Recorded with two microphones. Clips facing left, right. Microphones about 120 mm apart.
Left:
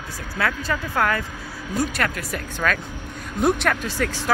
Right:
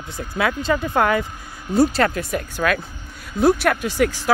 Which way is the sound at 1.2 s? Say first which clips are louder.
Left 2 dB; 90° left.